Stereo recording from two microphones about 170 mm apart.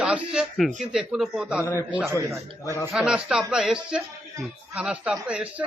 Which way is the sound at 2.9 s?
5° right (ahead or behind).